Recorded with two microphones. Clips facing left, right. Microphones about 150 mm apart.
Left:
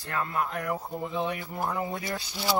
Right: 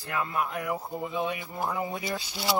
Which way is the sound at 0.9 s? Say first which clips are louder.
Even; 15° right (ahead or behind).